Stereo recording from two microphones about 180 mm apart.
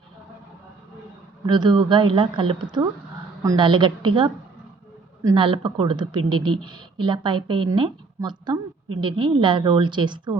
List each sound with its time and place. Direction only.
1.5 s speech: 25° right (ahead or behind)